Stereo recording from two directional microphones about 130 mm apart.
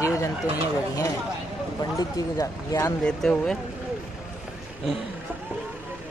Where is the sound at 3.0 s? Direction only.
5° left (ahead or behind).